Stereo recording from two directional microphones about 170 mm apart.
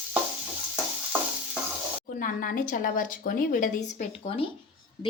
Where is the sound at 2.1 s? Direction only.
55° left (ahead or behind).